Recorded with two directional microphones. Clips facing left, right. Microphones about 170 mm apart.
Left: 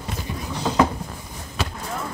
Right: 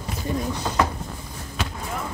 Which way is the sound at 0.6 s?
20° left (ahead or behind).